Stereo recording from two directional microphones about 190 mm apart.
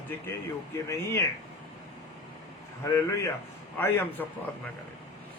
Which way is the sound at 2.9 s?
15° left (ahead or behind).